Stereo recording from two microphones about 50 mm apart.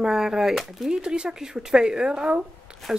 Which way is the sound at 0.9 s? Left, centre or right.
Centre.